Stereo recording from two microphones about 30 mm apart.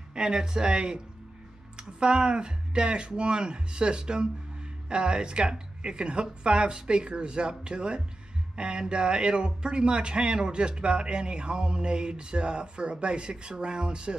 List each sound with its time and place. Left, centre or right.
0.1 s speech: right